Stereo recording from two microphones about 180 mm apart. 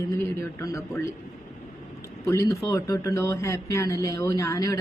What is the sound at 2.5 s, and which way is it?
Speech, 20° left (ahead or behind).